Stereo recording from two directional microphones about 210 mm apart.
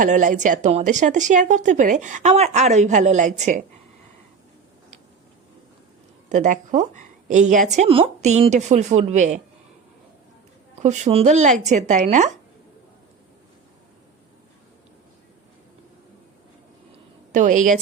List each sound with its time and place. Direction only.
0.0 s a woman's voice: 40° right (ahead or behind)
6.2 s a woman's voice: 35° right (ahead or behind)
10.8 s a woman's voice: 35° right (ahead or behind)
17.3 s a woman's voice: 35° right (ahead or behind)